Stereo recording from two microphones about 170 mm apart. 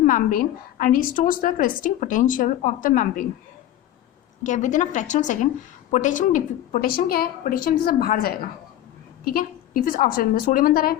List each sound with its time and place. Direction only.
0.0 s a woman's voice: 50° left (ahead or behind)
4.4 s a woman's voice: 45° left (ahead or behind)